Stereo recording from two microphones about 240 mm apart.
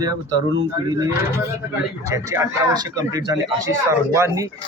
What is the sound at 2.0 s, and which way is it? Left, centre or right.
Speech, centre.